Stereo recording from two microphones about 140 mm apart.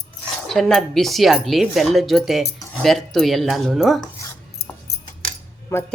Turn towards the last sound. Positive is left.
turn(degrees=20)  # may be behind; listen again after turning